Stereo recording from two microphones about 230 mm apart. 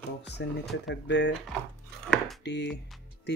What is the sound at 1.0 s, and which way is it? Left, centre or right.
Speech, left.